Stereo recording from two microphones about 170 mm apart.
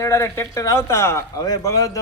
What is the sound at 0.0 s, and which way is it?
Speech, 20° left (ahead or behind).